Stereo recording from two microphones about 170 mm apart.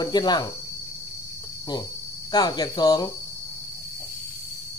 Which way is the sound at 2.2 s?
25° left (ahead or behind).